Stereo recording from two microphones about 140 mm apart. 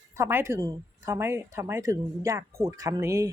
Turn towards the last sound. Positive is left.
turn(degrees=-20)  # may be behind; listen again after turning